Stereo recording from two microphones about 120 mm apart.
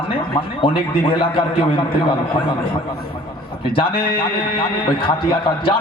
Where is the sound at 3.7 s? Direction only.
45° left (ahead or behind).